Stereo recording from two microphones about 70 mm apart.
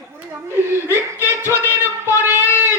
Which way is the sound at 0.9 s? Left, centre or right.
Left.